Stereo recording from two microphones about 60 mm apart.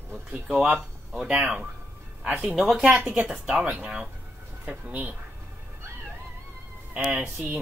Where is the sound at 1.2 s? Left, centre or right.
Centre.